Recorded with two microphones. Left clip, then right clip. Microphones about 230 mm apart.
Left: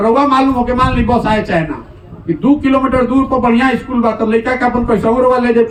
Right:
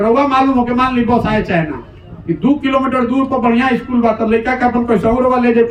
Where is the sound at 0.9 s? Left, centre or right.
Left.